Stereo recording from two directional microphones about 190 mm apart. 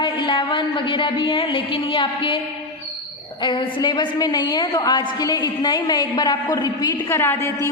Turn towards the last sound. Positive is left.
turn(degrees=15)  # may be behind; listen again after turning